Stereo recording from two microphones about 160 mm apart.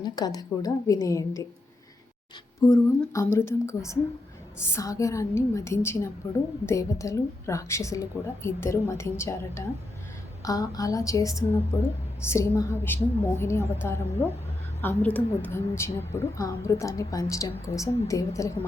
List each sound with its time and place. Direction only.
0.0 s a woman's voice: 25° left (ahead or behind)
2.6 s a woman's voice: 20° left (ahead or behind)